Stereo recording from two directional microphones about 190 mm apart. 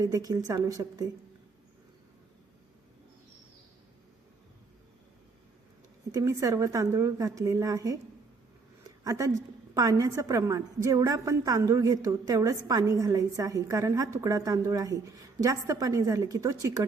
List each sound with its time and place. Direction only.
0.0 s a woman's voice: 20° right (ahead or behind)
6.1 s a woman's voice: 20° right (ahead or behind)
9.0 s a woman's voice: 20° right (ahead or behind)